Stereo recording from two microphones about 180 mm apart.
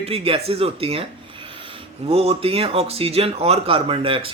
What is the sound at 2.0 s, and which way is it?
Speech, 35° right (ahead or behind).